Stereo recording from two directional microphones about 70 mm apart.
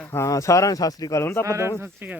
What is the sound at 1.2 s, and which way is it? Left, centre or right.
Speech, left.